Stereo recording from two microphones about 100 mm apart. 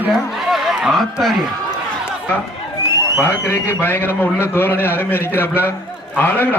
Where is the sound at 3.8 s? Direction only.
20° left (ahead or behind).